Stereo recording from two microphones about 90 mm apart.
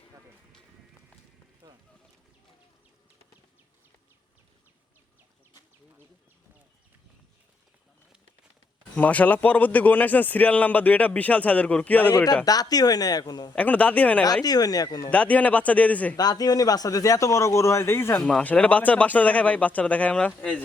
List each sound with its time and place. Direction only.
1.6 s a sound: 45° right (ahead or behind)
9.0 s a man's voice: 15° left (ahead or behind)
12.1 s speech: 45° left (ahead or behind)
13.6 s a man's voice: 15° left (ahead or behind)
14.4 s speech: 45° left (ahead or behind)
15.1 s a man's voice: 15° left (ahead or behind)
16.1 s a man's voice: 45° left (ahead or behind); by 18.2 s 25° left (ahead or behind)
18.2 s a man's voice: 10° left (ahead or behind)